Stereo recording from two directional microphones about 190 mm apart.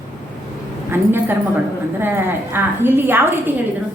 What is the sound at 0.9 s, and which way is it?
A woman's voice, 10° right (ahead or behind).